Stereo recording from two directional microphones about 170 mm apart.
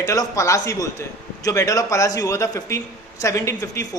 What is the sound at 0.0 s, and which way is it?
A man's voice, 20° left (ahead or behind).